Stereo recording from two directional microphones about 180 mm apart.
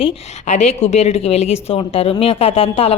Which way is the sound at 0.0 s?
40° left (ahead or behind).